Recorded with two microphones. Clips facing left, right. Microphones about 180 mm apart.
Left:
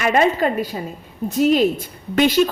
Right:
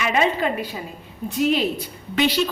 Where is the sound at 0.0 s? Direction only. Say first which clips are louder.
Left 4 dB; 45° left (ahead or behind).